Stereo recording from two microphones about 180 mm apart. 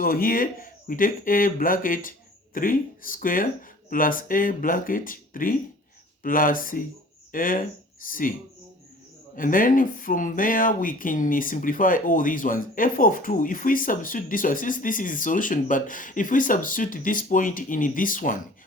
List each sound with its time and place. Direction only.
0.0 s speech: 55° left (ahead or behind)
9.3 s speech: 50° left (ahead or behind)